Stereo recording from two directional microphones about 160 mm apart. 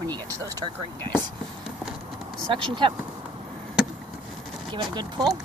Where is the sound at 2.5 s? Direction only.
30° right (ahead or behind).